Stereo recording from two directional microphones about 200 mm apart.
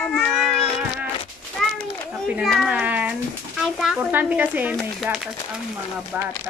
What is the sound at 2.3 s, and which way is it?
A child's voice, centre (ahead or behind).